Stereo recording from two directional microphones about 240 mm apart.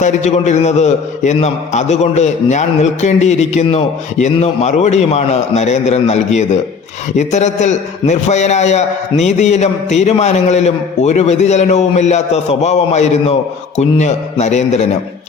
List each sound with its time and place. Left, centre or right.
0.0 s a man's voice: left